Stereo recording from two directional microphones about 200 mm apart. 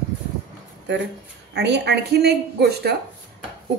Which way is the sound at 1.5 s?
55° right (ahead or behind).